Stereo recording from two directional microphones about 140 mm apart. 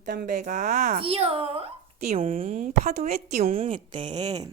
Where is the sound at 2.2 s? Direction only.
70° right (ahead or behind).